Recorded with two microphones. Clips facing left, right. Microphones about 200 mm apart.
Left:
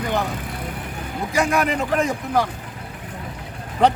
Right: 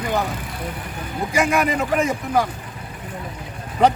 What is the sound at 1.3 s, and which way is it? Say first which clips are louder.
Speech: right 1 dB; centre (ahead or behind).